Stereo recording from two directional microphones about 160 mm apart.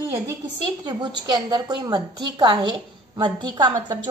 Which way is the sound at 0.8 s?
25° right (ahead or behind).